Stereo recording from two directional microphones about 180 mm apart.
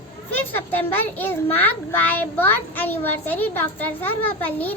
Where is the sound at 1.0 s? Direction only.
10° left (ahead or behind).